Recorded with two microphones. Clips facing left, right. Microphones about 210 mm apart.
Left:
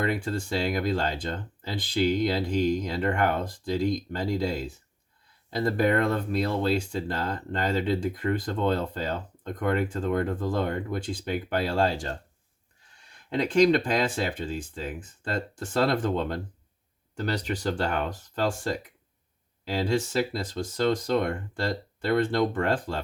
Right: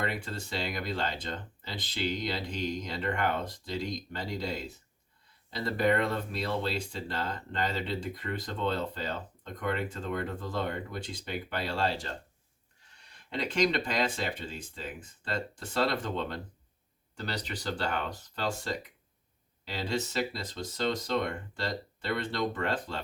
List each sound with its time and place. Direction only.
0.0 s speech: 50° left (ahead or behind)
13.3 s speech: 50° left (ahead or behind)
19.7 s speech: 50° left (ahead or behind)